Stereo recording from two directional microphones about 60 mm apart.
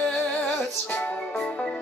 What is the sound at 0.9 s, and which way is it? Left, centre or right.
Music, left.